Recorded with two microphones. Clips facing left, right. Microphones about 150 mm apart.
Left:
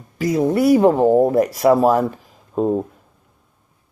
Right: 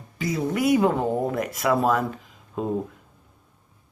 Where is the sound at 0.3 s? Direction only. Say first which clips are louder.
Left 9 dB; 55° left (ahead or behind).